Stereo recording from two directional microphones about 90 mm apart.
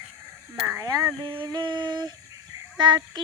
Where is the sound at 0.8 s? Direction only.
40° right (ahead or behind).